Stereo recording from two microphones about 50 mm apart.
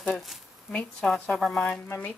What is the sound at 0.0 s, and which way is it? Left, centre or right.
Speech, centre.